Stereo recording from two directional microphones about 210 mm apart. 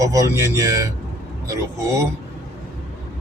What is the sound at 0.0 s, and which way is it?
Speech, 15° right (ahead or behind).